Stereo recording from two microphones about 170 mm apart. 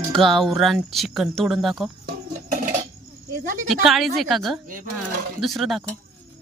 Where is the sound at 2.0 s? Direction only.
55° right (ahead or behind).